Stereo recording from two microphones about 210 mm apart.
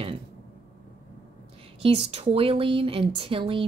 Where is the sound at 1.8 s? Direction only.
25° right (ahead or behind).